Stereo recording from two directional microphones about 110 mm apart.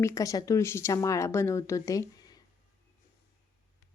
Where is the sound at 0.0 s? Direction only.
30° left (ahead or behind).